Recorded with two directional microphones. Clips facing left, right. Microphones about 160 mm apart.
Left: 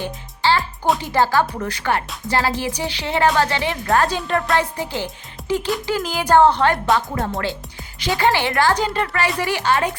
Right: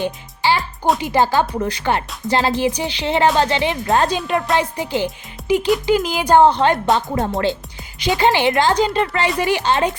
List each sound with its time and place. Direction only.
0.0 s music: 15° right (ahead or behind)
1.0 s speech: 20° right (ahead or behind)
7.9 s speech: 20° right (ahead or behind)